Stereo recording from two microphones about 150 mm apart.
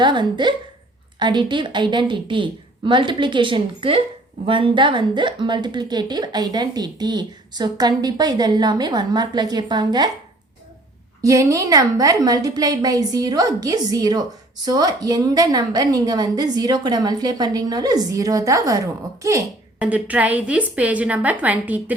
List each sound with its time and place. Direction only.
0.0 s a woman's voice: 30° right (ahead or behind)
11.2 s a woman's voice: 20° right (ahead or behind)
19.8 s a woman's voice: 10° right (ahead or behind)